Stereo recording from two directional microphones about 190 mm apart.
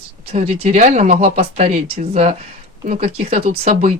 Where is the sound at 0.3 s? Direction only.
35° right (ahead or behind).